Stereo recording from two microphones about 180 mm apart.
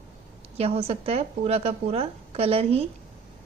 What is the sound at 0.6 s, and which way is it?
Speech, 35° right (ahead or behind).